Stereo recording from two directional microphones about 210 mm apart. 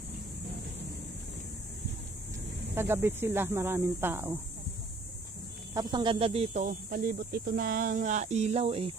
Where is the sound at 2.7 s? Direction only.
10° right (ahead or behind).